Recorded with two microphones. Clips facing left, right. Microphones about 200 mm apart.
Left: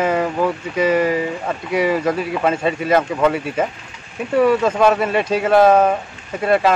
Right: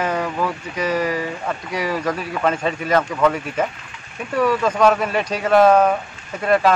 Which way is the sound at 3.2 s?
10° left (ahead or behind).